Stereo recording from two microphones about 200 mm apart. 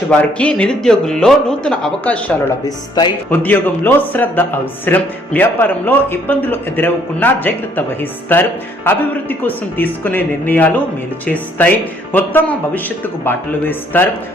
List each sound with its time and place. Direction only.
0.1 s speech: 5° left (ahead or behind)
2.6 s speech: 20° left (ahead or behind)
3.2 s speech: 10° left (ahead or behind)